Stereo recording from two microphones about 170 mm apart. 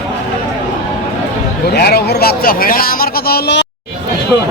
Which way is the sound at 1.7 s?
70° left (ahead or behind).